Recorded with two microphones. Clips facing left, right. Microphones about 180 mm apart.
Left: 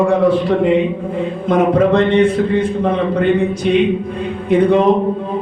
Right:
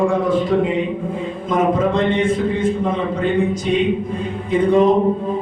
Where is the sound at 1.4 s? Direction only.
65° left (ahead or behind).